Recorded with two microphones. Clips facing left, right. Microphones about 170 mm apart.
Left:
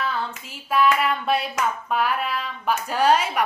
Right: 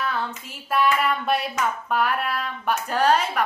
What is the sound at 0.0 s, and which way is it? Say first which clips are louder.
Hands: even; centre (ahead or behind).